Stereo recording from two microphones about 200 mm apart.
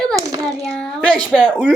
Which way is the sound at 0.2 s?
15° right (ahead or behind).